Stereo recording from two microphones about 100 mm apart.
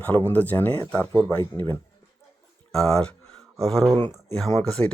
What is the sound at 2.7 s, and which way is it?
Speech, 5° left (ahead or behind).